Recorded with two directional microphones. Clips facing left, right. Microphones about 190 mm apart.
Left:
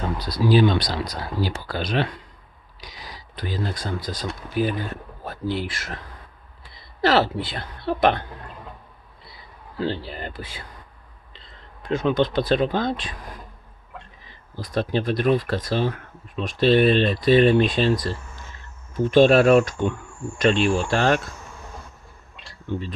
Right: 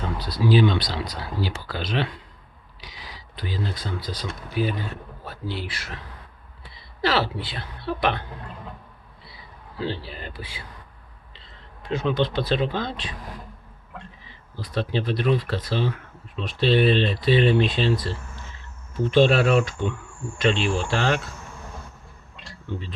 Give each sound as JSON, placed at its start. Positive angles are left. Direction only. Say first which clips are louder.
{"t": 0.2, "sound": "speech", "louder": "left 1 dB", "side_deg": 40}
{"t": 7.0, "sound": "speech", "louder": "left 4 dB", "side_deg": 45}
{"t": 9.8, "sound": "speech", "louder": "left 3 dB", "side_deg": 50}
{"t": 11.8, "sound": "speech", "louder": "left 3 dB", "side_deg": 50}
{"t": 14.6, "sound": "speech", "louder": "left 3 dB", "side_deg": 45}
{"t": 19.1, "sound": "speech", "louder": "left 4 dB", "side_deg": 45}